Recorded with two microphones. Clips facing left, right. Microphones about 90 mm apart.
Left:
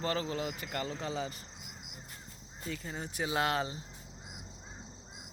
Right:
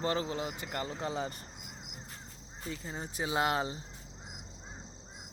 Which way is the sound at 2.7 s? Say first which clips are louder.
Even; 20° right (ahead or behind).